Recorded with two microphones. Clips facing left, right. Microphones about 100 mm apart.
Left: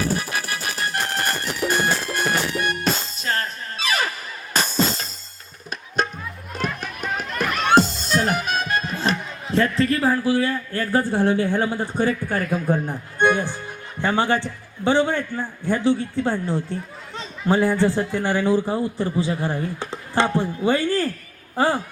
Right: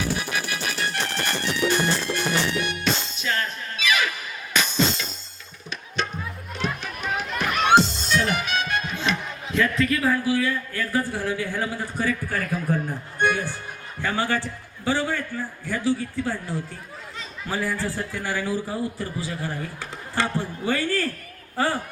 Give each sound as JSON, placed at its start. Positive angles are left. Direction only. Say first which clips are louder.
{"t": 0.1, "sound": "music", "louder": "left 2 dB", "side_deg": 40}
{"t": 8.0, "sound": "music", "louder": "left 2 dB", "side_deg": 45}
{"t": 8.9, "sound": "a man's voice", "louder": "left 3 dB", "side_deg": 40}
{"t": 17.2, "sound": "a sound", "louder": "left 9 dB", "side_deg": 30}
{"t": 17.9, "sound": "a man's voice", "louder": "left 7 dB", "side_deg": 25}